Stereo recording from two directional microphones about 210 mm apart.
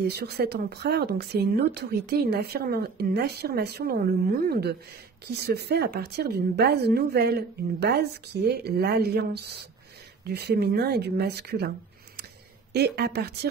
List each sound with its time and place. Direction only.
0.0 s speech: 50° right (ahead or behind)
12.7 s speech: 50° right (ahead or behind)